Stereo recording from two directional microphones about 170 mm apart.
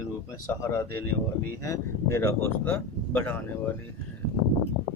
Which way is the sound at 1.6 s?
15° left (ahead or behind).